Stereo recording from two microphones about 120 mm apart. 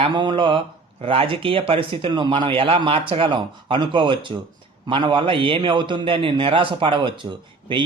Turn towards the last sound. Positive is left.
turn(degrees=-45)  # may be behind; listen again after turning